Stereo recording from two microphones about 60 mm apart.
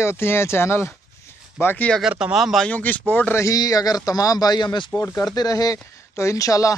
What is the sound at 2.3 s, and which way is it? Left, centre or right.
Speech, centre.